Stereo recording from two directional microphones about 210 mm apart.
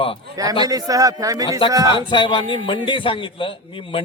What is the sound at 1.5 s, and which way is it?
Music, 25° left (ahead or behind).